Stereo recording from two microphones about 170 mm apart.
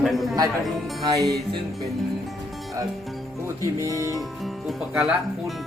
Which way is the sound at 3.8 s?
20° right (ahead or behind).